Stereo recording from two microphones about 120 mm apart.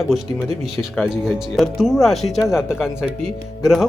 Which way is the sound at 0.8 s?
5° right (ahead or behind).